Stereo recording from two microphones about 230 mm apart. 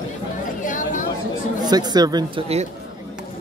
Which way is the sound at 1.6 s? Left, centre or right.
Centre.